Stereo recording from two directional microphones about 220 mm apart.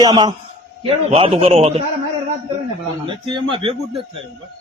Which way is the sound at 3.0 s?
20° right (ahead or behind).